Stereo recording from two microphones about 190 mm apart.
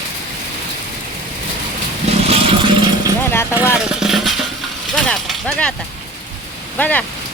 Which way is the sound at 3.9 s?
Centre (ahead or behind).